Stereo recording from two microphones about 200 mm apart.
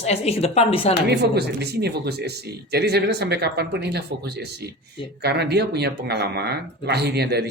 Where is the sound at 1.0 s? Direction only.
55° right (ahead or behind).